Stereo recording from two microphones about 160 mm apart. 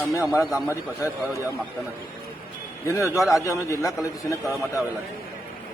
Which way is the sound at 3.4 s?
20° left (ahead or behind).